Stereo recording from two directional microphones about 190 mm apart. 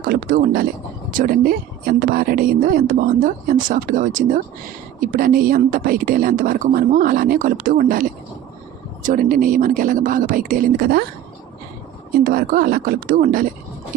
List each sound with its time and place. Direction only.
0.0 s speech: 45° right (ahead or behind)
12.2 s speech: 50° right (ahead or behind)